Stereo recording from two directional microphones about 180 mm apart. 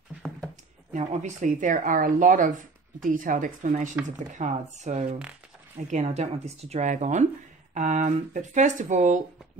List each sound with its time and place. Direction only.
0.9 s speech: 40° right (ahead or behind)